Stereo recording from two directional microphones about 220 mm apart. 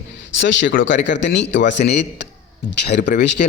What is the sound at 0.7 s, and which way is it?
A man's voice, 45° left (ahead or behind).